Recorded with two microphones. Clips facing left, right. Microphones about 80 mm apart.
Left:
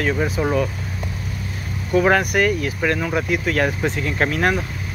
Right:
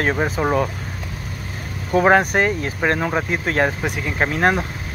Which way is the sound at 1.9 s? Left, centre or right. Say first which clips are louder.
Right 2 dB; right.